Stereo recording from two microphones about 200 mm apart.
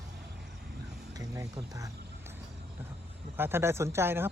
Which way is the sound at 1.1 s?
15° right (ahead or behind).